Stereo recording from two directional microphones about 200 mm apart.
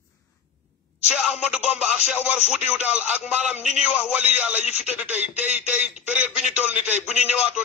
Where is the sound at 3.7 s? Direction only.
30° left (ahead or behind).